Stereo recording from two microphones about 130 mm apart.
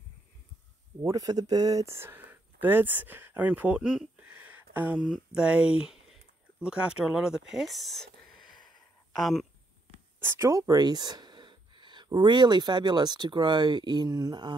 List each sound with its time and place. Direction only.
1.0 s speech: 30° right (ahead or behind); by 8.5 s centre (ahead or behind)
8.5 s a sound: centre (ahead or behind)
10.2 s speech: 20° right (ahead or behind)